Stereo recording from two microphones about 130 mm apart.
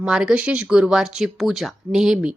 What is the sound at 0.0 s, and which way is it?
Speech, 5° right (ahead or behind).